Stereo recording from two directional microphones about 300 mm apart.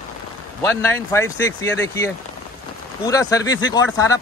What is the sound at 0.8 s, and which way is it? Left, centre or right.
Speech, centre.